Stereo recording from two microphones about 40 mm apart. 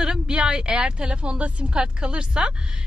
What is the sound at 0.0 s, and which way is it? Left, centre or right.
Speech, right.